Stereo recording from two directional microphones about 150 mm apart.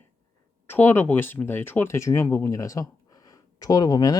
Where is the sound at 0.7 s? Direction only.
15° left (ahead or behind).